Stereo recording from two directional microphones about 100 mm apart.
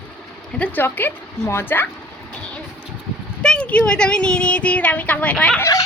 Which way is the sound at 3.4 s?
10° left (ahead or behind).